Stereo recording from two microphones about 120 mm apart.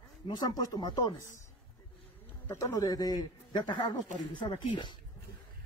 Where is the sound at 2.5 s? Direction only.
25° left (ahead or behind).